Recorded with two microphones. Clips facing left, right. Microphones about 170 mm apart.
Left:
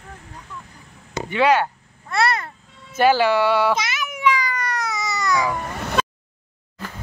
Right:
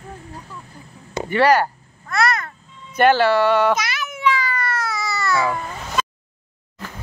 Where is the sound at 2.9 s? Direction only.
5° left (ahead or behind).